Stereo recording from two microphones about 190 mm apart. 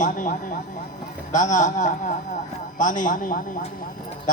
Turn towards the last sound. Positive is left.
turn(degrees=45)  # may be behind; listen again after turning